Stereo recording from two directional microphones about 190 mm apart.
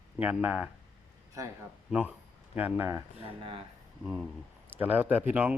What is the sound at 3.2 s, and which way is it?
Speech, 30° right (ahead or behind).